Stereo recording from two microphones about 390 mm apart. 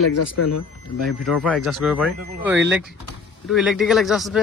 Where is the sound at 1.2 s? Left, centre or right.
Centre.